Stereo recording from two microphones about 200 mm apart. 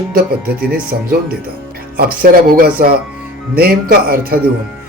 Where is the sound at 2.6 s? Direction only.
50° right (ahead or behind).